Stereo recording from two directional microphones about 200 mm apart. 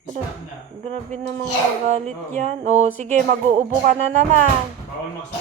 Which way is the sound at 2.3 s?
35° right (ahead or behind).